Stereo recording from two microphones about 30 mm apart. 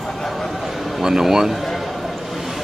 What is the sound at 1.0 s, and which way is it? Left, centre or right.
Speech, centre.